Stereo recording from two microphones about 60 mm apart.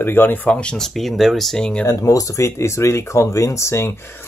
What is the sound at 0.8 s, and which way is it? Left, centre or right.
Speech, centre.